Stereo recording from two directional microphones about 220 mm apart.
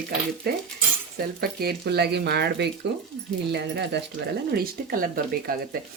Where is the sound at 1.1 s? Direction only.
45° right (ahead or behind).